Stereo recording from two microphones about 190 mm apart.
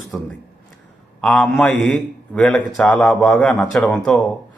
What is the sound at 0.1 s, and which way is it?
A man's voice, 10° left (ahead or behind).